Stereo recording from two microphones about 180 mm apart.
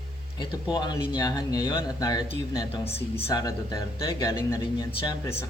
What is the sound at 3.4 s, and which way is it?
Speech, 20° left (ahead or behind).